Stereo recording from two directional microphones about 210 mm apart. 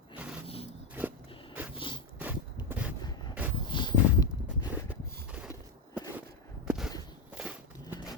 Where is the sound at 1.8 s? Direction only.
20° left (ahead or behind).